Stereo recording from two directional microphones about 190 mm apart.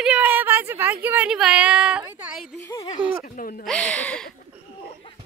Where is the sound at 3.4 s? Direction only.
50° left (ahead or behind).